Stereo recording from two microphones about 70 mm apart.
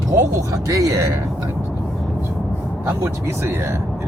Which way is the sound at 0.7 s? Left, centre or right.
Right.